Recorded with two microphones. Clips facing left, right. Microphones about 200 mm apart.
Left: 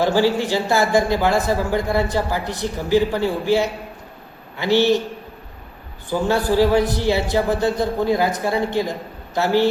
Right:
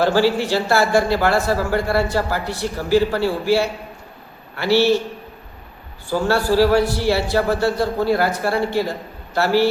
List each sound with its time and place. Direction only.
0.0 s speech: 15° left (ahead or behind)
6.1 s speech: 15° left (ahead or behind)